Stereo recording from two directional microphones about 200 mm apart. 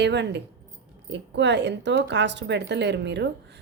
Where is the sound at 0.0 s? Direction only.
60° right (ahead or behind).